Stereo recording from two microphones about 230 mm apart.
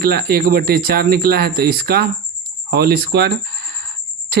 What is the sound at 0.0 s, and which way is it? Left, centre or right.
Speech, right.